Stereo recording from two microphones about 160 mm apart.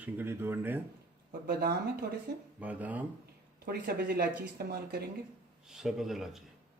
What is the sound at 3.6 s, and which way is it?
Speech, 75° right (ahead or behind).